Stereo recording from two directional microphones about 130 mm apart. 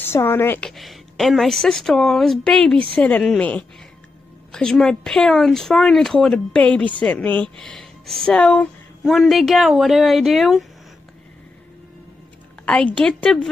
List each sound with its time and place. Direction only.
0.0 s a woman's voice: 15° left (ahead or behind)
0.7 s speech: centre (ahead or behind)
12.6 s a woman's voice: 10° left (ahead or behind)